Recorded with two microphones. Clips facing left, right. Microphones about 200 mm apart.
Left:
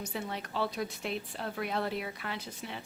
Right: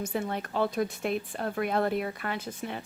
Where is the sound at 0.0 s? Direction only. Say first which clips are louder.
Right 6 dB; 50° right (ahead or behind).